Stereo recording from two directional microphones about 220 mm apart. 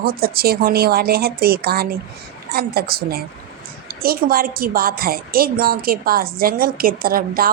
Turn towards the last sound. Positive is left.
turn(degrees=-40)  # may be behind; listen again after turning